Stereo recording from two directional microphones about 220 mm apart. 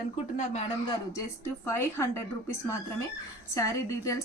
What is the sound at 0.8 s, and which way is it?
A woman's voice, 15° left (ahead or behind).